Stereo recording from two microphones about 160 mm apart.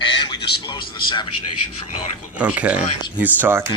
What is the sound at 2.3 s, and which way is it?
Speech, 10° right (ahead or behind).